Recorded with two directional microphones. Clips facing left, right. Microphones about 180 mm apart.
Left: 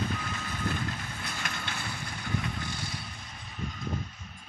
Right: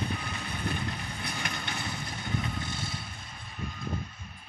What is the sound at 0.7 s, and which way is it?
Vehicle, 15° right (ahead or behind).